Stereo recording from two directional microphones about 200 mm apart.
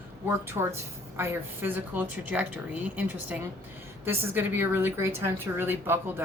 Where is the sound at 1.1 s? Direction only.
10° right (ahead or behind).